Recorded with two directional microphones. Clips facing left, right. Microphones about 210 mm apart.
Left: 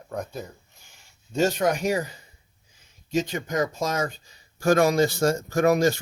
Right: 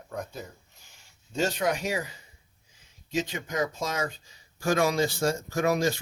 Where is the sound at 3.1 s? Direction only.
45° left (ahead or behind).